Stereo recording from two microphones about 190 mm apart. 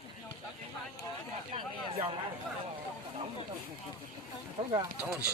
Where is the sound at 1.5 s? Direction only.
25° right (ahead or behind).